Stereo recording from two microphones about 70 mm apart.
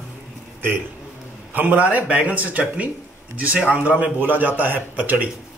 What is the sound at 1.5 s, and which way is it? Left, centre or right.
Speech, right.